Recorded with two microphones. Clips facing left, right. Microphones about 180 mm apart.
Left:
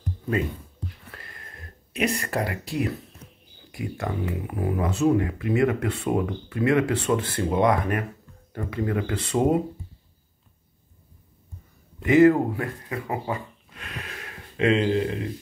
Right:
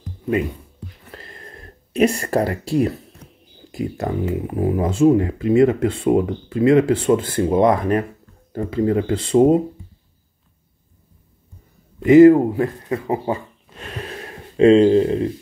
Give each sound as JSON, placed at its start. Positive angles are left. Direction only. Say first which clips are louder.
{"t": 1.1, "sound": "a sound", "louder": "right 7 dB", "side_deg": -25}
{"t": 3.7, "sound": "speech", "louder": "right 6 dB", "side_deg": -25}
{"t": 12.2, "sound": "speech", "louder": "right 7 dB", "side_deg": -25}